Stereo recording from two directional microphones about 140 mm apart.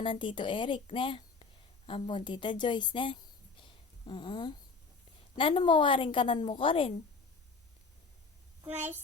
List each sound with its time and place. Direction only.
0.0 s a woman's voice: 35° left (ahead or behind)
3.6 s a sound: 35° left (ahead or behind)
5.4 s a woman's voice: 35° left (ahead or behind)
8.6 s a child's voice: 15° right (ahead or behind)